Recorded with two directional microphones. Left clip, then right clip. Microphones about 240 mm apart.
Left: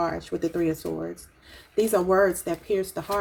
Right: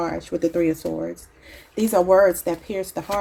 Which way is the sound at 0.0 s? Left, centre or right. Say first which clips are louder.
Right 1 dB; right.